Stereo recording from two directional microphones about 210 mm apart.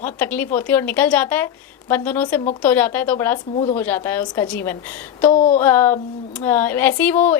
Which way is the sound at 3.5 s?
30° left (ahead or behind).